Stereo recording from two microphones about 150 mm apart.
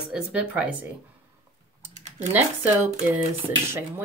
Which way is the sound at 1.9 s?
50° right (ahead or behind).